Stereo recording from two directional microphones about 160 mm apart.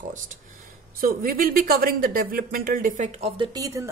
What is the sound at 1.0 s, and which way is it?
Speech, 65° right (ahead or behind).